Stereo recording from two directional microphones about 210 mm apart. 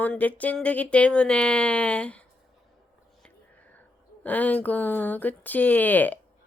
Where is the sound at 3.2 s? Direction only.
5° left (ahead or behind).